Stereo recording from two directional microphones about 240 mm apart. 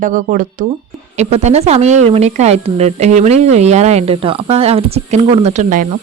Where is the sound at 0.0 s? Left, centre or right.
Right.